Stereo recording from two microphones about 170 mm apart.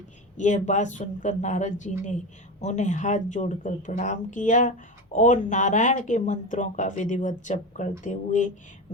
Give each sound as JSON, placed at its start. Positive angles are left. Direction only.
{"t": 0.3, "sound": "speech", "side_deg": 45}